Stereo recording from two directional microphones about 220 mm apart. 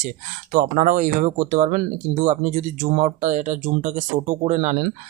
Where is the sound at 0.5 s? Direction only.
35° right (ahead or behind).